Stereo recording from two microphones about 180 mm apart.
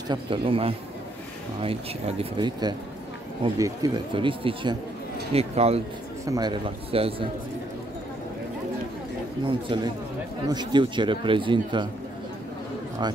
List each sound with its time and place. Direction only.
0.1 s a man's voice: 30° right (ahead or behind)
6.2 s a man's voice: 20° right (ahead or behind)
9.4 s a man's voice: 25° right (ahead or behind)
13.0 s a man's voice: 25° right (ahead or behind)